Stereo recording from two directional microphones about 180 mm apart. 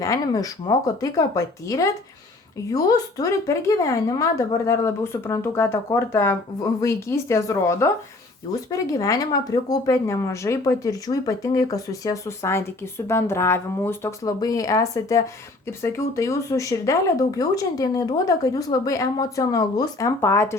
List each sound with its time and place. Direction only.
0.0 s speech: 20° left (ahead or behind)
8.9 s speech: 20° left (ahead or behind)